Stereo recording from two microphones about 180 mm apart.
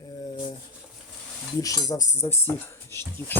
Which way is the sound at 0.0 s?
20° left (ahead or behind).